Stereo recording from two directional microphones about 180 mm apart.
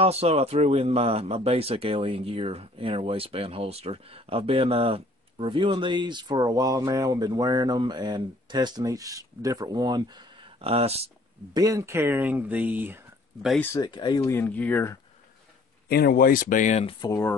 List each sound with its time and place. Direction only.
0.0 s speech: 35° right (ahead or behind)
11.5 s speech: 20° right (ahead or behind)
13.6 s speech: 15° left (ahead or behind)
13.8 s speech: 25° left (ahead or behind)
15.9 s speech: 60° left (ahead or behind); by 16.9 s 40° left (ahead or behind)
17.0 s speech: 15° left (ahead or behind)